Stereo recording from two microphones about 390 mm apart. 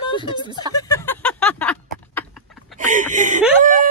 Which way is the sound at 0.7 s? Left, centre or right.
Centre.